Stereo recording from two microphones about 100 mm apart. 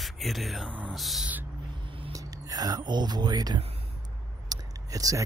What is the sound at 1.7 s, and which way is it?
Vehicle, 60° right (ahead or behind).